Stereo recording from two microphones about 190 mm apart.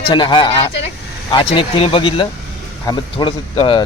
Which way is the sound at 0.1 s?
25° left (ahead or behind).